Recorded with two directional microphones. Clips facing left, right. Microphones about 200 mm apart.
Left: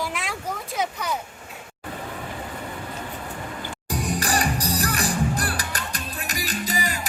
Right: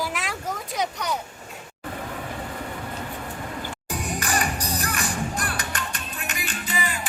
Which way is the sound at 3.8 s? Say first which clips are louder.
Left 4 dB; 35° left (ahead or behind).